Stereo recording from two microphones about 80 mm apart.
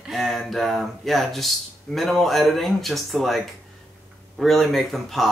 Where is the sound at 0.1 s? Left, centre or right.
Centre.